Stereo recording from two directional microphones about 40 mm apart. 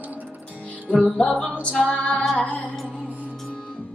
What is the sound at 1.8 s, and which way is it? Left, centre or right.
Female singing, left.